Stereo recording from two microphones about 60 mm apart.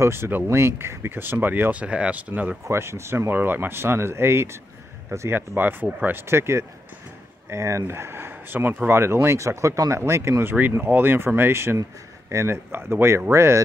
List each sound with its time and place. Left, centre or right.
0.0 s speech: right
1.7 s speech: right
2.6 s speech: right
10.5 s speech: right